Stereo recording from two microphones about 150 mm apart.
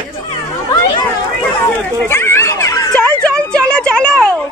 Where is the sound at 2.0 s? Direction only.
15° left (ahead or behind).